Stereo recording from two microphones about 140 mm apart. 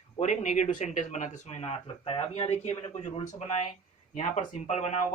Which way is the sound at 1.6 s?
45° left (ahead or behind).